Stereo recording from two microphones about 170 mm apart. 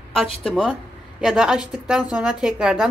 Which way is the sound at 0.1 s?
Centre (ahead or behind).